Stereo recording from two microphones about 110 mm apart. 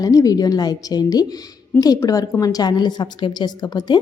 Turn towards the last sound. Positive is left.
turn(degrees=40)  # may be behind; listen again after turning